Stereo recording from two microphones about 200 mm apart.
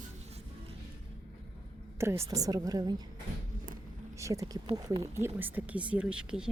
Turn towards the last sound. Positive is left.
turn(degrees=-5)  # may be behind; listen again after turning